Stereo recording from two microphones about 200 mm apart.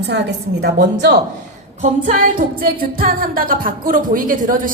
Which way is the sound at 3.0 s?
45° right (ahead or behind).